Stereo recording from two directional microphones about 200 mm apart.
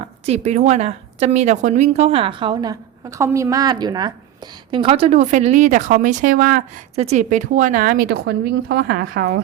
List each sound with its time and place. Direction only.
0.3 s a woman's voice: 35° right (ahead or behind)
6.9 s speech: 30° right (ahead or behind); by 9.3 s 50° right (ahead or behind)